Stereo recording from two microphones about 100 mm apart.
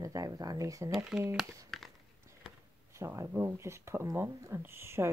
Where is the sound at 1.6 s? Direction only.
Centre (ahead or behind).